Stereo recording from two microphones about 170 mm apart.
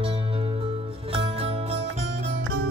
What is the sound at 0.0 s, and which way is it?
Music, 30° right (ahead or behind).